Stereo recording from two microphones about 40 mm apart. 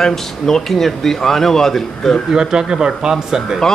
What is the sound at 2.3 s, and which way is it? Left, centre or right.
Speech, centre.